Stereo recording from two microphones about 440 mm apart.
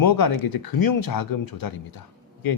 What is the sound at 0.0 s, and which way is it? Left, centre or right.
Speech, left.